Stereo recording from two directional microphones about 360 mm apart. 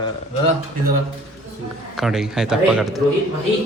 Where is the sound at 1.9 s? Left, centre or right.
Centre.